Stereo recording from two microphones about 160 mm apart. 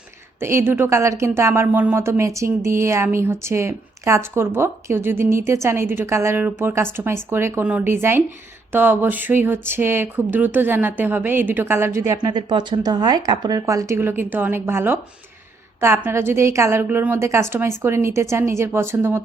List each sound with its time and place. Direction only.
0.3 s speech: 15° right (ahead or behind)